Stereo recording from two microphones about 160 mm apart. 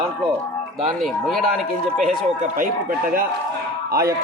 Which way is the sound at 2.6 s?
60° right (ahead or behind).